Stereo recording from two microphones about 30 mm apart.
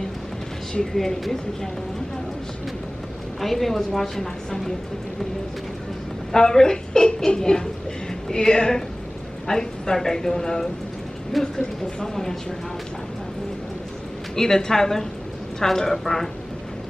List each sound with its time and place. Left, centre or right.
0.9 s speech: centre
3.3 s speech: centre
6.3 s speech: left
14.3 s speech: centre